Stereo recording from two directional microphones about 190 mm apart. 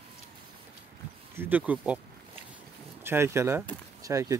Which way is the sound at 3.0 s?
10° right (ahead or behind).